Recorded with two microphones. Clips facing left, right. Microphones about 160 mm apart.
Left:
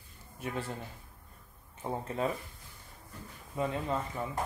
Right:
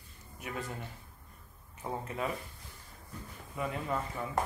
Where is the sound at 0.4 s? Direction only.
30° left (ahead or behind).